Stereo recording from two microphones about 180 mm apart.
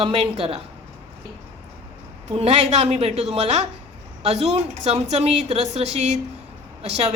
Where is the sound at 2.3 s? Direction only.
35° right (ahead or behind).